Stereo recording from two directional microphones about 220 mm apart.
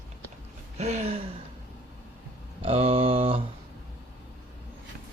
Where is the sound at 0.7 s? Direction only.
30° right (ahead or behind).